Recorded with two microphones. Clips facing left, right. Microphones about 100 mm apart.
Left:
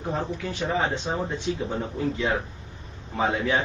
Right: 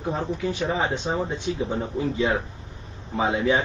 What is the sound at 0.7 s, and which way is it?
A man's voice, 15° right (ahead or behind).